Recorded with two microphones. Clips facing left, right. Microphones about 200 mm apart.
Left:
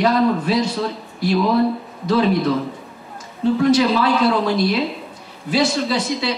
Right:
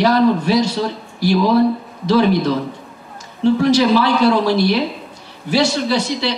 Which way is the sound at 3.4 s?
75° right (ahead or behind).